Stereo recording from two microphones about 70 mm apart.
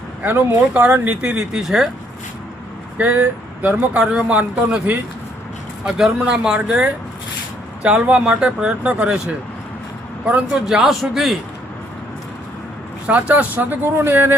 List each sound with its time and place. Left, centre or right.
0.2 s speech: right
1.2 s speech: centre
3.1 s speech: right
3.9 s speech: centre
10.7 s a man's voice: centre
13.1 s speech: centre